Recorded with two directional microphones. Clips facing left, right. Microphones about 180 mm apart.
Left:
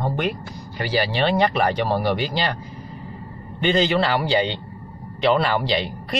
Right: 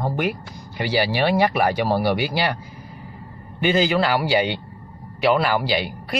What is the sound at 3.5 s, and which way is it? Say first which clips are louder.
A man's voice: even; 5° right (ahead or behind).